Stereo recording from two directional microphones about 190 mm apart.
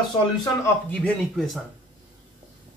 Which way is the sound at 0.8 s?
5° left (ahead or behind).